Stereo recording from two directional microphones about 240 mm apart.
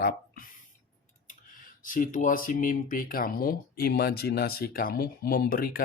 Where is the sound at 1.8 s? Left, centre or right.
Left.